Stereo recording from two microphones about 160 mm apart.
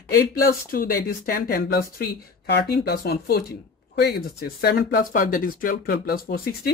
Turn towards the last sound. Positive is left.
turn(degrees=70)  # may be behind; listen again after turning